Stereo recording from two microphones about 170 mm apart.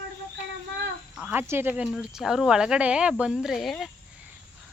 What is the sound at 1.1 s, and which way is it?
Speech, 5° right (ahead or behind).